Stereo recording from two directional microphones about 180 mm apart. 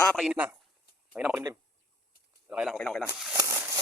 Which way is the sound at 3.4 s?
15° right (ahead or behind).